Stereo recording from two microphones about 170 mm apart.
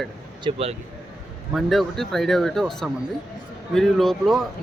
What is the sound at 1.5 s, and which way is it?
Speech, centre (ahead or behind).